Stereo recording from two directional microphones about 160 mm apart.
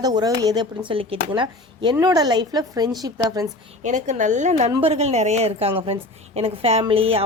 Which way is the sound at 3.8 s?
50° right (ahead or behind).